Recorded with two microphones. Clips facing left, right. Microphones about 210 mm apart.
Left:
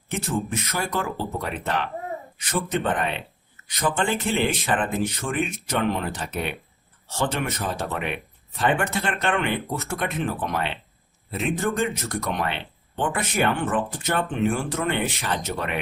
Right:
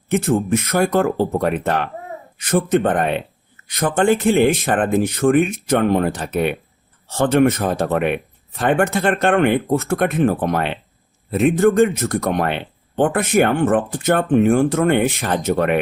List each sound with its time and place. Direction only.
0.1 s speech: 50° right (ahead or behind)